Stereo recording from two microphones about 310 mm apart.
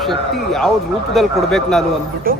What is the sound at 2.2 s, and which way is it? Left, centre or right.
Speech, right.